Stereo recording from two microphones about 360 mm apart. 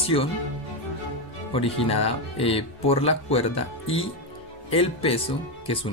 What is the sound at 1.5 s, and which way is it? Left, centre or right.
Speech, centre.